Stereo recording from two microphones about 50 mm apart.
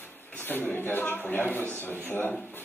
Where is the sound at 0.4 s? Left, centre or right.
Left.